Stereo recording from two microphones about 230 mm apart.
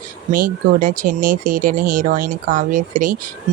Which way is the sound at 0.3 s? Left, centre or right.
Right.